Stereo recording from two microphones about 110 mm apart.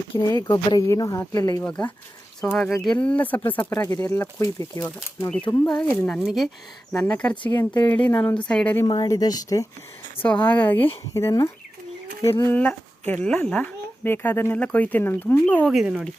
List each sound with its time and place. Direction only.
0.2 s speech: 35° left (ahead or behind)
0.8 s speech: 30° left (ahead or behind)
1.6 s speech: 10° left (ahead or behind)
2.4 s speech: 20° left (ahead or behind)
2.8 s speech: 10° left (ahead or behind)
3.7 s speech: 30° left (ahead or behind)
4.4 s speech: 35° left (ahead or behind)
5.6 s speech: 10° left (ahead or behind)
8.9 s speech: 35° left (ahead or behind)
10.2 s speech: 15° left (ahead or behind)
11.1 s speech: 30° left (ahead or behind)
12.5 s speech: 15° left (ahead or behind)
15.7 s speech: 5° right (ahead or behind)